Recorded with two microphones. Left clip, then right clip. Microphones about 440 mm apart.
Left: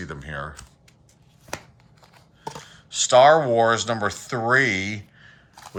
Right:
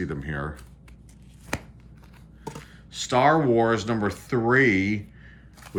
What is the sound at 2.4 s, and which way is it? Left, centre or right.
Speech, centre.